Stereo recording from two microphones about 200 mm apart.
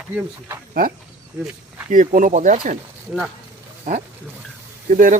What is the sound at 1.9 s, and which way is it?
Speech, 40° right (ahead or behind).